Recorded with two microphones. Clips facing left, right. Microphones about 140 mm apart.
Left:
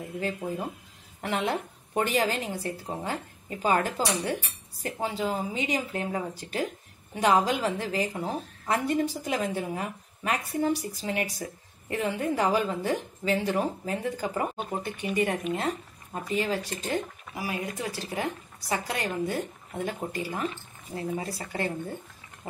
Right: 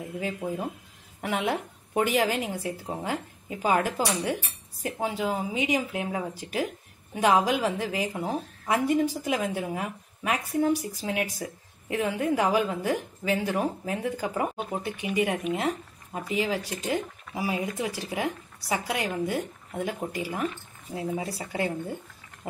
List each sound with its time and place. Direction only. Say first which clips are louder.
0.0 s a woman's voice: even; 5° right (ahead or behind)
17.3 s a woman's voice: right 4 dB; 20° right (ahead or behind)